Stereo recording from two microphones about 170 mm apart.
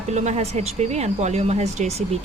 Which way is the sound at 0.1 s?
40° right (ahead or behind).